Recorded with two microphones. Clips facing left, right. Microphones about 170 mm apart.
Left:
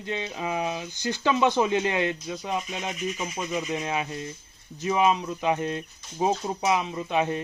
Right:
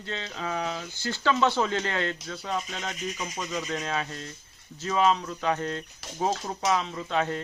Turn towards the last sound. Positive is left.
turn(degrees=15)  # may be behind; listen again after turning